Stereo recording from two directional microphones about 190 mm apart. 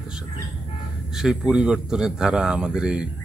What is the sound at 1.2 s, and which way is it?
Speech, centre (ahead or behind).